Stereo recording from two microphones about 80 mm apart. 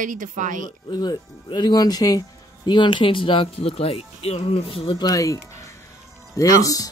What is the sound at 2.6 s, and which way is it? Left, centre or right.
Speech, left.